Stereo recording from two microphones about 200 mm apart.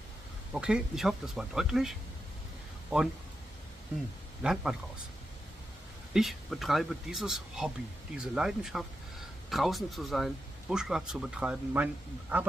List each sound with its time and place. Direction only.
0.5 s a man's voice: 5° right (ahead or behind)
4.4 s a man's voice: 5° right (ahead or behind)
6.1 s a man's voice: centre (ahead or behind)